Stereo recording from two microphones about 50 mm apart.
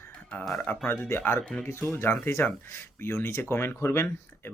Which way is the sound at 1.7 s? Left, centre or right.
Left.